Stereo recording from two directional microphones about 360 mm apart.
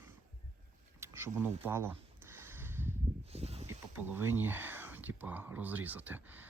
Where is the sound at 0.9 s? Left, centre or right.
Centre.